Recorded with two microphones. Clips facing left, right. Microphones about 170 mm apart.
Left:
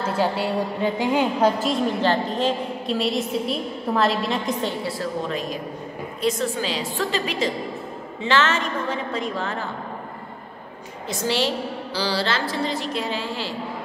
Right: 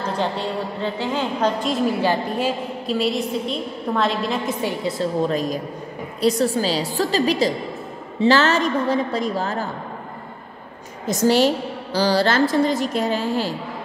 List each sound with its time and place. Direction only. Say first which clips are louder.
0.0 s a woman's voice: left 1 dB; 10° left (ahead or behind)
1.7 s a woman's voice: right 1 dB; 10° right (ahead or behind)
5.2 s a woman's voice: right 6 dB; 40° right (ahead or behind)
11.1 s a woman's voice: right 7 dB; 45° right (ahead or behind)